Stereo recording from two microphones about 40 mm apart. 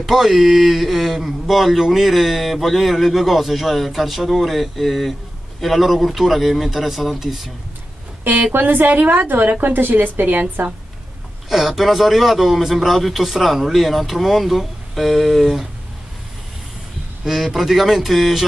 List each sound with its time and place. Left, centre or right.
0.0 s speech: centre
8.2 s a woman's voice: right
11.4 s speech: centre
17.2 s speech: centre